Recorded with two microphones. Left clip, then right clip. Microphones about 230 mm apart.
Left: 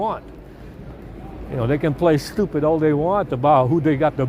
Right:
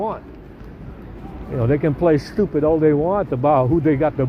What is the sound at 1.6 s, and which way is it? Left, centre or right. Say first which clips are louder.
Speech: right 1 dB; left.